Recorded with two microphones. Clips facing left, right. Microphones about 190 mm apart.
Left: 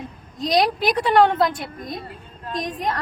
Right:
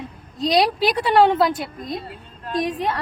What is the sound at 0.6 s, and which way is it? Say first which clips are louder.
A woman's voice: even; 5° right (ahead or behind).